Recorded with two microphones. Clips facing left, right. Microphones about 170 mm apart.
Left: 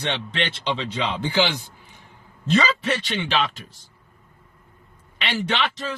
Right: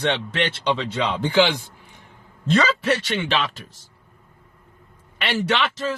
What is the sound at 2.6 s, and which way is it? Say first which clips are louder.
Speech: right 2 dB; 70° right (ahead or behind).